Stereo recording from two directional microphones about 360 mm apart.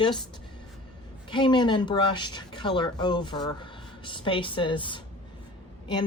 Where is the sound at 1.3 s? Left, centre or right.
Centre.